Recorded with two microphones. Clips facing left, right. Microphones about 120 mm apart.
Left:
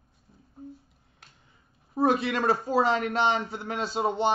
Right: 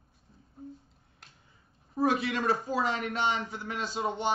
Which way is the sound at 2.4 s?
40° left (ahead or behind).